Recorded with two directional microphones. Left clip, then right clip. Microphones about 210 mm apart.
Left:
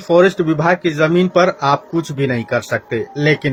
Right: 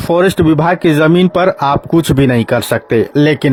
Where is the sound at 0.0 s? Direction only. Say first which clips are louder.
Right 1 dB; 45° right (ahead or behind).